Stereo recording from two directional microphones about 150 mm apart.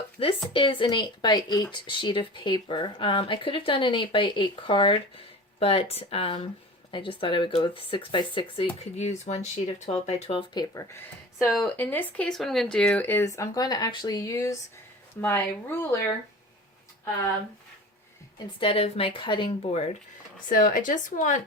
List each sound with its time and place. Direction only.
0.2 s speech: 40° left (ahead or behind)
8.8 s speech: 45° left (ahead or behind)
10.5 s speech: 30° left (ahead or behind)
11.4 s speech: centre (ahead or behind)
11.8 s speech: 15° left (ahead or behind)
18.3 s speech: 35° left (ahead or behind)
20.5 s speech: 70° left (ahead or behind)